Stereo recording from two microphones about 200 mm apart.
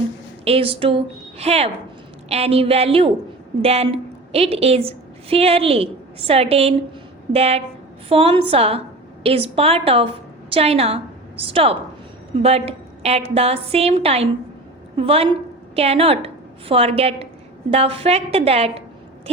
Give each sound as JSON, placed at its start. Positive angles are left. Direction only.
{"t": 0.4, "sound": "a woman's voice", "side_deg": -30}